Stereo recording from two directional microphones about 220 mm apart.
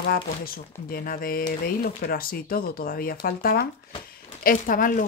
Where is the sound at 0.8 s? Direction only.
40° left (ahead or behind).